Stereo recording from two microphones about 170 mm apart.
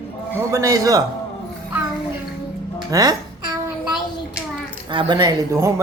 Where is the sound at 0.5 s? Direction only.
20° right (ahead or behind).